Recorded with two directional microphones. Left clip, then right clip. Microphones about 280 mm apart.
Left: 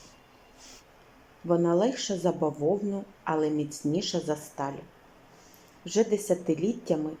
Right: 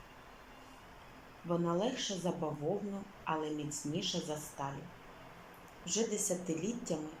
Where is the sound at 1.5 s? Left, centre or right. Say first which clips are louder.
Left 10 dB; left.